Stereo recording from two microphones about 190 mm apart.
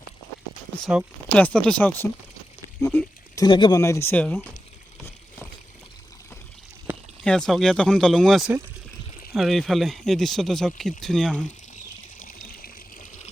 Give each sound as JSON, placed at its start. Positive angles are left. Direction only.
{"t": 0.9, "sound": "speech", "side_deg": -5}
{"t": 6.9, "sound": "a sound", "side_deg": -10}
{"t": 7.3, "sound": "speech", "side_deg": 5}
{"t": 12.2, "sound": "water", "side_deg": 50}